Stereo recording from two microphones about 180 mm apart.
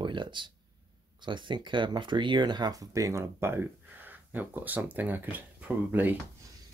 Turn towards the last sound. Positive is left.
turn(degrees=-10)  # may be behind; listen again after turning